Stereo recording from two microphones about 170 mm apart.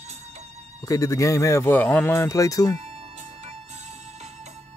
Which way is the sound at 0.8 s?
20° left (ahead or behind).